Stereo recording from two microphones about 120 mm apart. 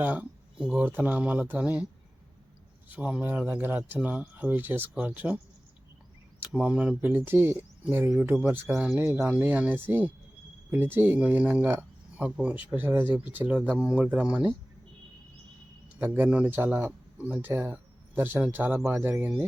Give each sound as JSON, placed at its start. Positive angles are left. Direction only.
{"t": 0.0, "sound": "speech", "side_deg": -15}
{"t": 2.9, "sound": "speech", "side_deg": -10}
{"t": 6.6, "sound": "speech", "side_deg": -10}
{"t": 8.7, "sound": "speech", "side_deg": 0}
{"t": 9.0, "sound": "speech", "side_deg": -25}
{"t": 16.0, "sound": "speech", "side_deg": -15}